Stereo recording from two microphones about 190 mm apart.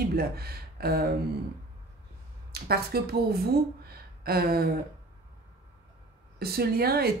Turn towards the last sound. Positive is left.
turn(degrees=-55)  # may be behind; listen again after turning